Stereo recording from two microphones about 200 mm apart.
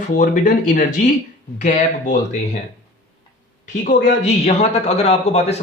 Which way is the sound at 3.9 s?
35° left (ahead or behind).